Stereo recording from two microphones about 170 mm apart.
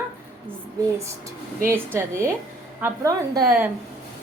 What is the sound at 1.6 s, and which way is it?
A woman's voice, 15° right (ahead or behind).